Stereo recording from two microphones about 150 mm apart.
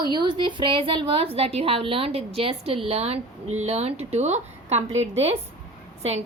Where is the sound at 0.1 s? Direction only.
30° right (ahead or behind).